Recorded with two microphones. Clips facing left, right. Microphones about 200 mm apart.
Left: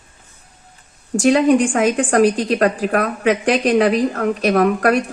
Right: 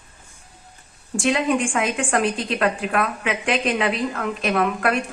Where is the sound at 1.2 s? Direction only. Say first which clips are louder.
Left 7 dB; 40° left (ahead or behind).